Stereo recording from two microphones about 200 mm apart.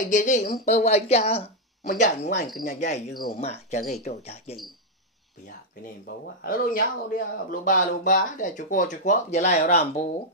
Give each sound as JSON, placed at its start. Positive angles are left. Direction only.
{"t": 0.0, "sound": "speech", "side_deg": 40}
{"t": 1.8, "sound": "speech", "side_deg": 45}
{"t": 6.0, "sound": "speech", "side_deg": 50}